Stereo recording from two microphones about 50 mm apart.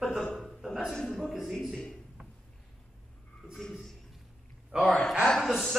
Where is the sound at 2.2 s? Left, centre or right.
Centre.